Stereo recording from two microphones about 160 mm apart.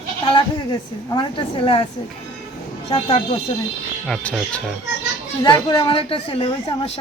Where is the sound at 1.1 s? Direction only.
35° left (ahead or behind).